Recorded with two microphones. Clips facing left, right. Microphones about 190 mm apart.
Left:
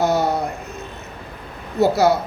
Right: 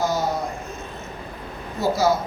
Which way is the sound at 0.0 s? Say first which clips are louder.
Left 5 dB; 65° left (ahead or behind).